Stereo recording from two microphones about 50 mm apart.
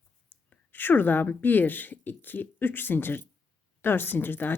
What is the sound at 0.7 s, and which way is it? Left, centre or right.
Speech, left.